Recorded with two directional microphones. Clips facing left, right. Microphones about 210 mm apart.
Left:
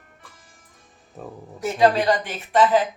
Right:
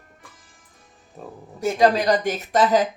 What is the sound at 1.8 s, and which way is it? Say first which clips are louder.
Speech: even; 40° right (ahead or behind).